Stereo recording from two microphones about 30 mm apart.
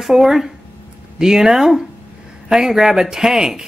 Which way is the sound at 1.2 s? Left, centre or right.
Centre.